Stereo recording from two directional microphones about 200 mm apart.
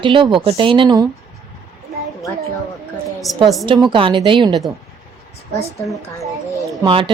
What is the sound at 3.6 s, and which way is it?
Speech, 25° right (ahead or behind).